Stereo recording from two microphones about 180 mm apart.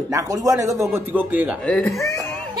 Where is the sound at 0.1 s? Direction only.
20° right (ahead or behind).